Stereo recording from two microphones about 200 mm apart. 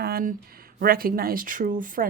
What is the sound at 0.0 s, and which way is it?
Speech, 50° right (ahead or behind).